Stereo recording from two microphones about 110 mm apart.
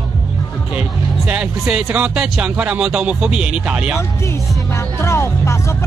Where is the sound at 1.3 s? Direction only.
10° right (ahead or behind).